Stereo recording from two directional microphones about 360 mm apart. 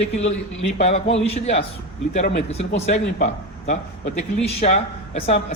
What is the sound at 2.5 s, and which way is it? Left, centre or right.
A man's voice, centre.